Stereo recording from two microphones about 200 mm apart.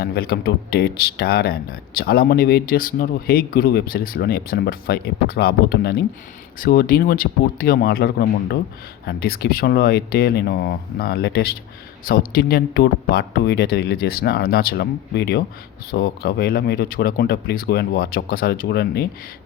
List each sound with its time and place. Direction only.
0.0 s speech: 50° left (ahead or behind)